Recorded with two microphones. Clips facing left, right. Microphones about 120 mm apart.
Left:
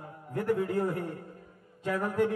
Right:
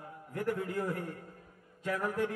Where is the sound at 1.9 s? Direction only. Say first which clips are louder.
Left 5 dB; 35° left (ahead or behind).